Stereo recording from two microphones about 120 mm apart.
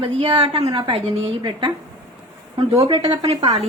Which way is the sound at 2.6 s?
55° right (ahead or behind).